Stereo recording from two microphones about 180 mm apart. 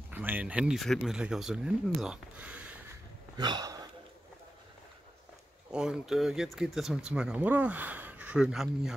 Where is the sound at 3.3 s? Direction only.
20° right (ahead or behind).